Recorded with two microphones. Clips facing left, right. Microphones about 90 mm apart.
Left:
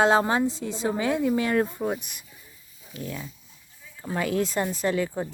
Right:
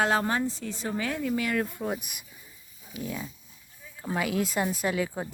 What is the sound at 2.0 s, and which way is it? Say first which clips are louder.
Speech: even; 10° right (ahead or behind).